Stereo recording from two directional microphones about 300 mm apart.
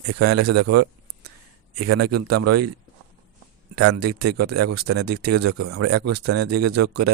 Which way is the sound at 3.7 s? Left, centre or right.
Right.